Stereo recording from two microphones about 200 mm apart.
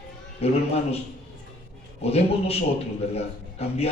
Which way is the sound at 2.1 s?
30° left (ahead or behind).